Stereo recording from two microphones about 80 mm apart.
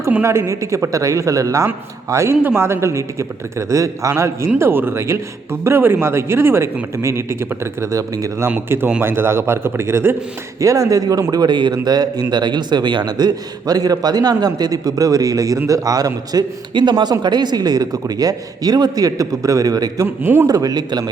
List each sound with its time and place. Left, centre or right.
0.2 s a man's voice: right
8.4 s a man's voice: right
10.6 s a man's voice: right
20.2 s a man's voice: right
20.5 s a man's voice: right